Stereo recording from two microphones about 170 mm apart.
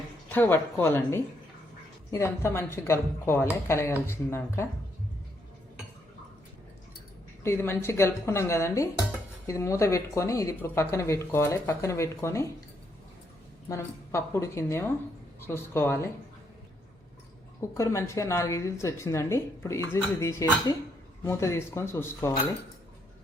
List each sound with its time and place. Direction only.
0.3 s a woman's voice: 10° left (ahead or behind)
7.4 s a woman's voice: 15° left (ahead or behind)
13.7 s a woman's voice: 15° left (ahead or behind)
17.7 s a woman's voice: 15° left (ahead or behind)